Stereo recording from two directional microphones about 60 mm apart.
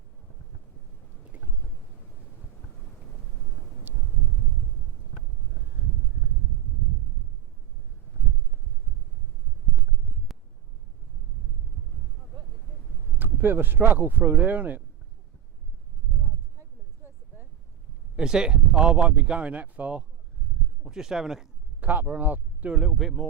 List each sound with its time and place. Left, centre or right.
3.9 s a sound: right
10.3 s a sound: centre
13.1 s speech: right
18.2 s speech: centre
20.8 s speech: centre
21.8 s speech: right
22.7 s speech: centre